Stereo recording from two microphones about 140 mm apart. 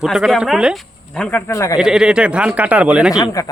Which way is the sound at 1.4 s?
20° left (ahead or behind).